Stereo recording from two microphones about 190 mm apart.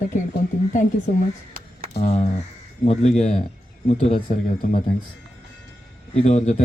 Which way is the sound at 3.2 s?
40° left (ahead or behind).